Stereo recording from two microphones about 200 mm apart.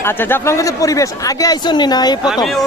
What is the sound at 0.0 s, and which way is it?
Speech, 10° left (ahead or behind).